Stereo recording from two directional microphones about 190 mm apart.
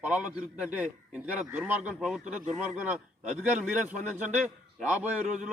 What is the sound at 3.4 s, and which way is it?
A man's voice, 5° right (ahead or behind).